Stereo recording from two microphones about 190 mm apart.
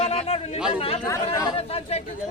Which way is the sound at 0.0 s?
30° left (ahead or behind).